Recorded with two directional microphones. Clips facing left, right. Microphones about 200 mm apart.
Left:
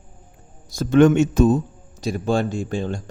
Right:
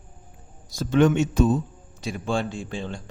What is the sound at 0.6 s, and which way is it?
Speech, 50° left (ahead or behind).